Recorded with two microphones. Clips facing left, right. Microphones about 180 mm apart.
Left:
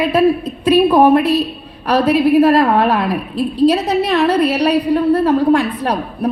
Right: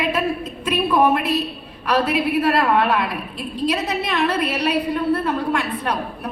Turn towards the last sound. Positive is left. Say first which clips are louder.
# left 7 dB
turn(degrees=35)  # may be behind; listen again after turning